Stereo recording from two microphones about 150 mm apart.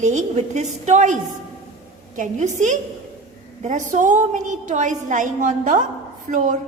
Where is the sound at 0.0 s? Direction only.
50° right (ahead or behind).